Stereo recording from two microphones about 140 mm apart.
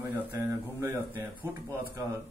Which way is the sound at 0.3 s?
20° right (ahead or behind).